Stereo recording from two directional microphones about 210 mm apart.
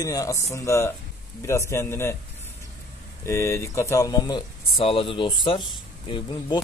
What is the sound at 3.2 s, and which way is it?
Speech, 10° left (ahead or behind).